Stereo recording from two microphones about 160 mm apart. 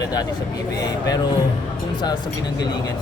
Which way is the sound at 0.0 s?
25° left (ahead or behind).